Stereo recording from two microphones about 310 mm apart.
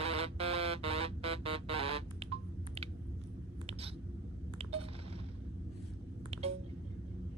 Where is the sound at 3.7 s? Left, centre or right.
Centre.